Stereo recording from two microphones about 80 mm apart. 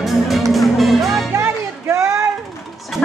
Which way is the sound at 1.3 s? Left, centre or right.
Right.